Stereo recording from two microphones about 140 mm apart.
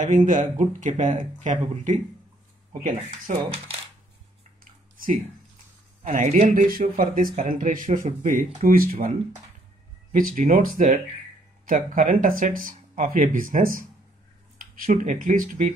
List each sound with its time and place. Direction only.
0.0 s speech: 65° right (ahead or behind); by 3.7 s 45° right (ahead or behind)
4.9 s a sound: 85° right
6.2 s speech: 50° right (ahead or behind)
6.5 s speech: 90° right
7.4 s speech: 75° right (ahead or behind)